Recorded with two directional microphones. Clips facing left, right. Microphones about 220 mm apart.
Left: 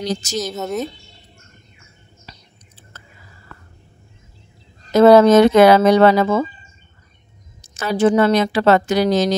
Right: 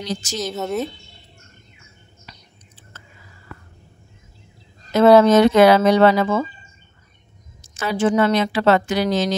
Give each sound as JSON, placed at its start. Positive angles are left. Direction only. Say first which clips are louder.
{"t": 0.0, "sound": "a woman's voice", "louder": "left 4 dB", "side_deg": 40}
{"t": 0.4, "sound": "a woman's voice", "louder": "right 2 dB", "side_deg": 0}
{"t": 2.3, "sound": "a sound", "louder": "left 2 dB", "side_deg": 30}
{"t": 4.9, "sound": "speech", "louder": "left 3 dB", "side_deg": 40}
{"t": 7.6, "sound": "a woman's voice", "louder": "left 4 dB", "side_deg": 40}